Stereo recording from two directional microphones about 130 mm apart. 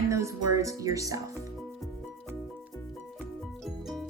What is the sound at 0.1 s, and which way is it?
Speech, 25° right (ahead or behind).